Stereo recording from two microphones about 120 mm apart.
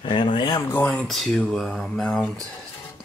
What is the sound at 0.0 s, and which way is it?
Speech, 45° left (ahead or behind).